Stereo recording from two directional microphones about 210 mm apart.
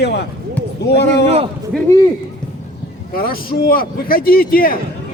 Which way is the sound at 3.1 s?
45° left (ahead or behind).